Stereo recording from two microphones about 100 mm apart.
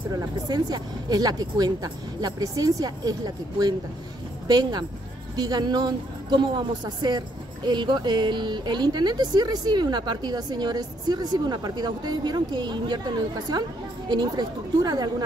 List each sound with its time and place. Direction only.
0.1 s a woman's voice: 45° right (ahead or behind)